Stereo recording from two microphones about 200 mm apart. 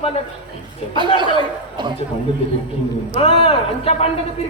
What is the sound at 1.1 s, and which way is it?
Speech, 25° right (ahead or behind).